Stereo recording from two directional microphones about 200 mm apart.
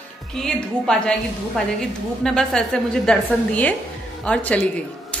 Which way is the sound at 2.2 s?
5° left (ahead or behind).